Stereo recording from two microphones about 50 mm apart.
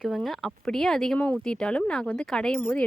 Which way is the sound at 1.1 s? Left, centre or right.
Left.